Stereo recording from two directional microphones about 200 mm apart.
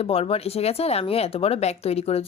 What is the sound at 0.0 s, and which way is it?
Speech, 30° left (ahead or behind).